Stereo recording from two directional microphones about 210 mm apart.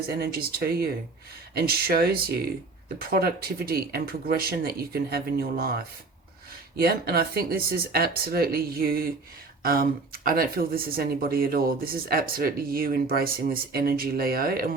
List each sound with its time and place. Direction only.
0.1 s speech: 50° right (ahead or behind)